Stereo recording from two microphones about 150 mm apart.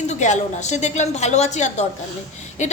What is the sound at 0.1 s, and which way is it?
A woman's voice, 50° left (ahead or behind).